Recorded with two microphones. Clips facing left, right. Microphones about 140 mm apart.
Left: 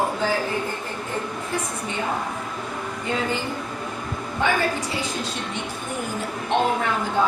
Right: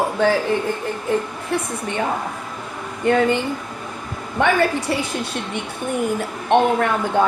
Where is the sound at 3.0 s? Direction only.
60° right (ahead or behind).